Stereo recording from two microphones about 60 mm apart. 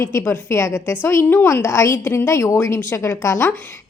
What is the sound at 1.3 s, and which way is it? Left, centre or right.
A woman's voice, left.